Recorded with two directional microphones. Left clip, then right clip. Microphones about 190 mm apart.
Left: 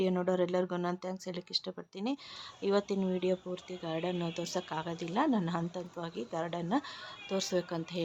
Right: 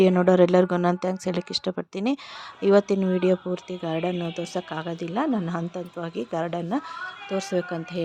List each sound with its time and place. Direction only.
0.0 s speech: 40° right (ahead or behind); by 8.0 s 25° right (ahead or behind)